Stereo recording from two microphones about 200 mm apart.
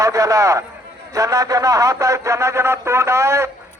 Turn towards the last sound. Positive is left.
turn(degrees=-15)  # may be behind; listen again after turning